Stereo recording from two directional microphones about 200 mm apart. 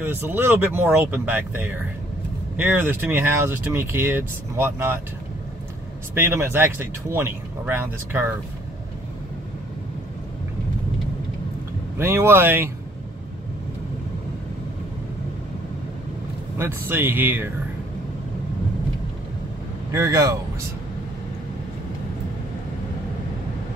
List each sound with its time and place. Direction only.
0.0 s speech: 10° right (ahead or behind)
6.1 s speech: 10° right (ahead or behind)
12.0 s speech: 10° right (ahead or behind)
16.5 s speech: 10° right (ahead or behind)
19.9 s speech: 15° right (ahead or behind)